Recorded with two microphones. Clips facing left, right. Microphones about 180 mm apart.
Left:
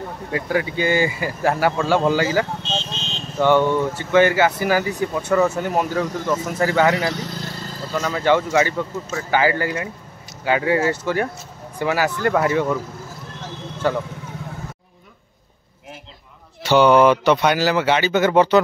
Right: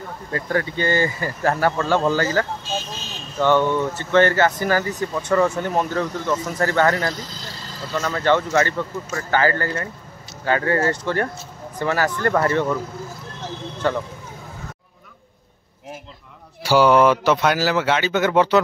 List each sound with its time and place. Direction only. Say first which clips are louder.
0.3 s speech: left 1 dB; 10° left (ahead or behind)
2.6 s vehicle: left 1 dB; 25° left (ahead or behind)
3.3 s speech: left 1 dB; 15° left (ahead or behind)
7.1 s speech: left 3 dB; 65° left (ahead or behind)
7.9 s speech: left 1 dB; 5° left (ahead or behind)
13.8 s speech: left 1 dB; 5° left (ahead or behind)
16.6 s speech: left 1 dB; 5° right (ahead or behind)